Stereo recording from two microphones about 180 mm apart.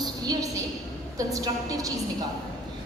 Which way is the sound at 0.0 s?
20° right (ahead or behind).